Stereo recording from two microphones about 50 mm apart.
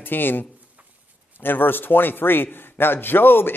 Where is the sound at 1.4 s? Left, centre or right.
Left.